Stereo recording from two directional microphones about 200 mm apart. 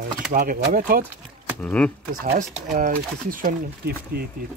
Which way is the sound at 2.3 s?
40° right (ahead or behind).